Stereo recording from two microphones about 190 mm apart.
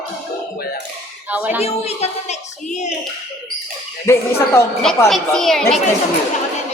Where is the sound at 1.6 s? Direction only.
35° left (ahead or behind).